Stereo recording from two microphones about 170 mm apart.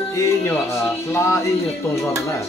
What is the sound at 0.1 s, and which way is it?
Music, 15° left (ahead or behind).